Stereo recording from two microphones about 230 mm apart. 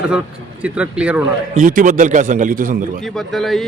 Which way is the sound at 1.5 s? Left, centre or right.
Right.